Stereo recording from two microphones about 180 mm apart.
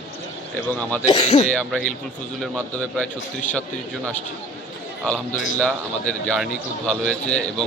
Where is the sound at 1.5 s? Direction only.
5° left (ahead or behind).